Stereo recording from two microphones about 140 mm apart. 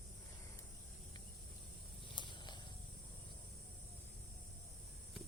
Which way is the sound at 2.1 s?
35° left (ahead or behind).